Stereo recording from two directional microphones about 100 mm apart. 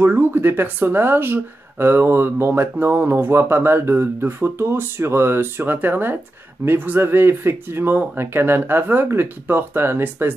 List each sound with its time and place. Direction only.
0.0 s speech: 20° right (ahead or behind)